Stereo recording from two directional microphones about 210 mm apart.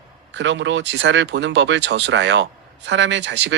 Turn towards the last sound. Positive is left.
turn(degrees=-60)  # may be behind; listen again after turning